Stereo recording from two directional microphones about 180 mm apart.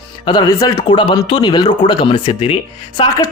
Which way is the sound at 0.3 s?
20° left (ahead or behind).